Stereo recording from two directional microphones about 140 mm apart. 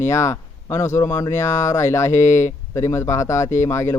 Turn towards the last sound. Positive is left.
turn(degrees=20)  # may be behind; listen again after turning